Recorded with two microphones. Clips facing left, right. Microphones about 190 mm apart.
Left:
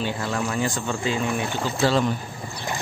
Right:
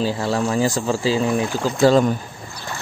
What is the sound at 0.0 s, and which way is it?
Speech, 35° right (ahead or behind).